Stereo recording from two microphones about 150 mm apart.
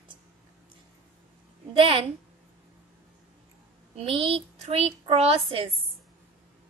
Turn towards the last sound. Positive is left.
turn(degrees=-40)  # may be behind; listen again after turning